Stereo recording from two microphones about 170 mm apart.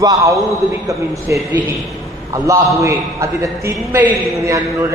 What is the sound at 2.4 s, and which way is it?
A man's voice, 20° right (ahead or behind).